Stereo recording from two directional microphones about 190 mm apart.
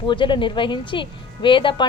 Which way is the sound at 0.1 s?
25° left (ahead or behind).